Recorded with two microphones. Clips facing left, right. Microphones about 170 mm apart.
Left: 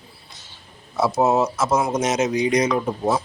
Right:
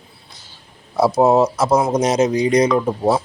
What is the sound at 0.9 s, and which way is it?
Speech, 35° right (ahead or behind).